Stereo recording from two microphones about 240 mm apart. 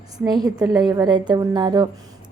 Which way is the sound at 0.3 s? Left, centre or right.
Centre.